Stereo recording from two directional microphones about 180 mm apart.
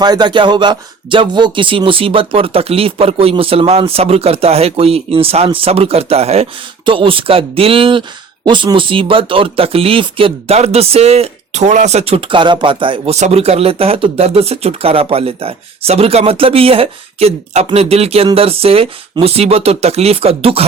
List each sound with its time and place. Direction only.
0.0 s speech: 25° right (ahead or behind)